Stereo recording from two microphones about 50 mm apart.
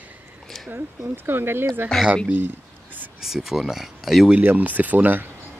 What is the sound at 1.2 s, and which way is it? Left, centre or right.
Speech, right.